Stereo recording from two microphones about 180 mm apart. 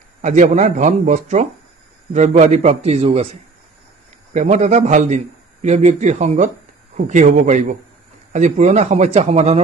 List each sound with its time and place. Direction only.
0.2 s a man's voice: 40° right (ahead or behind)